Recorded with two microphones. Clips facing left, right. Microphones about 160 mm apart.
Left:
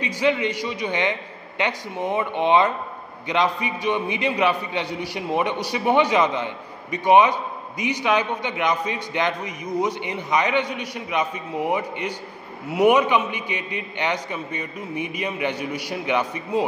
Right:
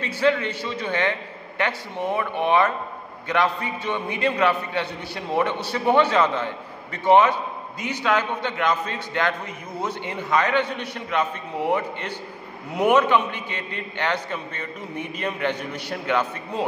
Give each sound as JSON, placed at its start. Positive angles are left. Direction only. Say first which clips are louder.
{"t": 0.0, "sound": "a man's voice", "louder": "even", "side_deg": 15}